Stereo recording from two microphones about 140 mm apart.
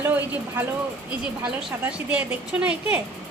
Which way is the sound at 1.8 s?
10° right (ahead or behind).